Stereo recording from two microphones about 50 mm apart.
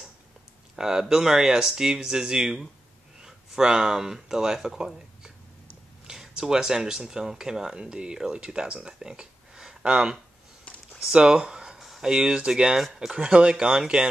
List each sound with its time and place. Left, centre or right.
0.7 s speech: centre
11.0 s a sound: centre
12.0 s speech: centre
12.7 s speech: centre